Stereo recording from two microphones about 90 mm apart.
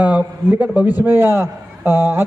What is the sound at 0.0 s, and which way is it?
A man's voice, 15° right (ahead or behind).